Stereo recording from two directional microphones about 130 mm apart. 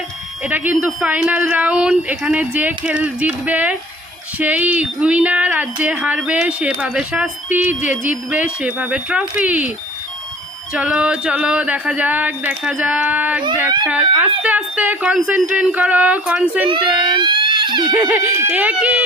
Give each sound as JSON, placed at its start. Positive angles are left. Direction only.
{"t": 0.4, "sound": "speech", "side_deg": -15}
{"t": 10.8, "sound": "speech", "side_deg": -10}
{"t": 16.6, "sound": "speech", "side_deg": -35}
{"t": 18.3, "sound": "speech", "side_deg": -10}